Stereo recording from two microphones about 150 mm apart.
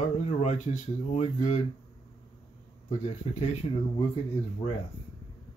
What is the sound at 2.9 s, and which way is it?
Speech, 50° left (ahead or behind).